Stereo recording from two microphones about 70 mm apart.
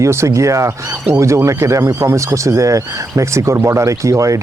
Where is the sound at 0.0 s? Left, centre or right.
Right.